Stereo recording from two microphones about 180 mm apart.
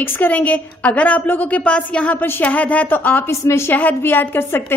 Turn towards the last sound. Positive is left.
turn(degrees=10)  # may be behind; listen again after turning